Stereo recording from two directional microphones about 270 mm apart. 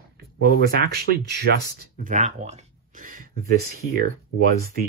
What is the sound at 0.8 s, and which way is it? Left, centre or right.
Speech, right.